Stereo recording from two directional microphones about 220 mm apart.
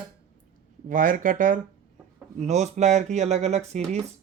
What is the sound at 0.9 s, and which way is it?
Speech, 35° right (ahead or behind).